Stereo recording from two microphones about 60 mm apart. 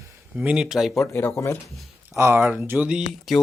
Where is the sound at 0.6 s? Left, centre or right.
Centre.